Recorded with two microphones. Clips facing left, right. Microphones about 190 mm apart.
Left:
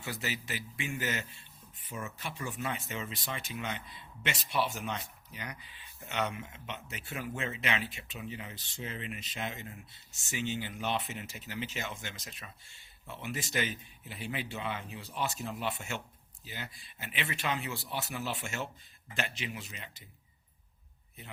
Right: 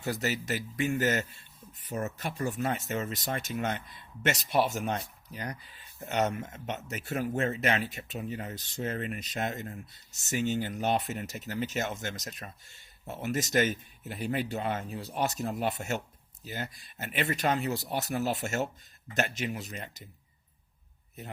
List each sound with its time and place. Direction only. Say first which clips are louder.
0.0 s speech: right 7 dB; 40° right (ahead or behind)
5.3 s speech: right 6 dB; 35° right (ahead or behind)